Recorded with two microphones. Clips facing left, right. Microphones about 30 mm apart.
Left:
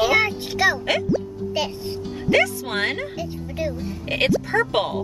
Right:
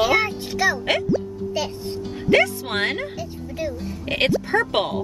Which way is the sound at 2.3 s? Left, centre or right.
Centre.